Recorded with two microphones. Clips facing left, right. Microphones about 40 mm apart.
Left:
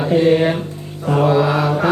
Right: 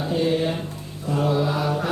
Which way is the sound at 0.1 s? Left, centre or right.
Left.